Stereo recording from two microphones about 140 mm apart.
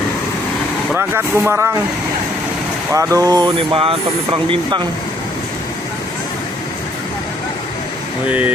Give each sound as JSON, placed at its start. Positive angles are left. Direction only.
{"t": 0.9, "sound": "speech", "side_deg": -15}
{"t": 2.9, "sound": "speech", "side_deg": -20}
{"t": 8.3, "sound": "speech", "side_deg": -10}